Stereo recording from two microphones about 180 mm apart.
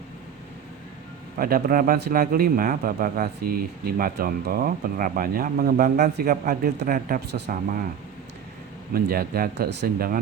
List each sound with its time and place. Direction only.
1.4 s a man's voice: 55° right (ahead or behind)
9.0 s a man's voice: 60° right (ahead or behind)